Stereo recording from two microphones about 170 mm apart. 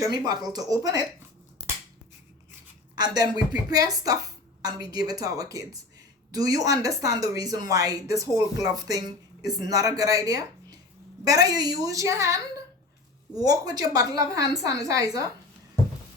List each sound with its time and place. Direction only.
0.0 s speech: 20° right (ahead or behind)
2.9 s speech: 25° right (ahead or behind)
13.4 s speech: 20° right (ahead or behind)